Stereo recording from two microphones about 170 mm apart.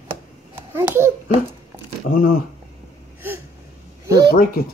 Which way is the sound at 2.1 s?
60° left (ahead or behind).